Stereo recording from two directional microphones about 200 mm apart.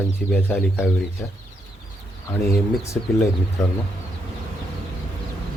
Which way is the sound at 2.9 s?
5° left (ahead or behind).